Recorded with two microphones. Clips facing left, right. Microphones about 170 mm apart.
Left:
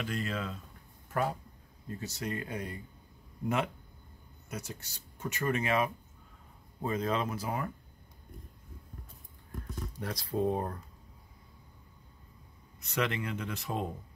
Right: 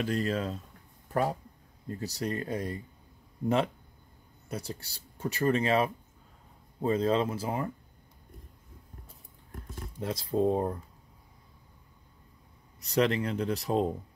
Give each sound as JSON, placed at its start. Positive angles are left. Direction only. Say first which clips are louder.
{"t": 0.0, "sound": "speech", "louder": "right 6 dB", "side_deg": -40}
{"t": 2.0, "sound": "speech", "louder": "right 4 dB", "side_deg": -35}
{"t": 9.9, "sound": "speech", "louder": "right 5 dB", "side_deg": -25}
{"t": 12.8, "sound": "speech", "louder": "right 6 dB", "side_deg": -35}